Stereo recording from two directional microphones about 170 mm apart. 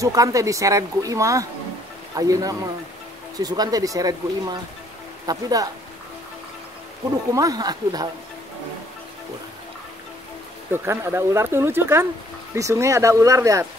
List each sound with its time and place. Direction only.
0.0 s speech: 20° right (ahead or behind)
7.3 s speech: 20° right (ahead or behind)
10.7 s speech: 15° right (ahead or behind)